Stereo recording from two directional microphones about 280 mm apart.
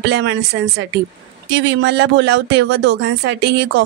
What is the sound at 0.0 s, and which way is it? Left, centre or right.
A woman's voice, right.